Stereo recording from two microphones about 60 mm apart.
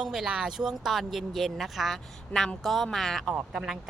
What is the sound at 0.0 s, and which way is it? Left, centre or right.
Speech, centre.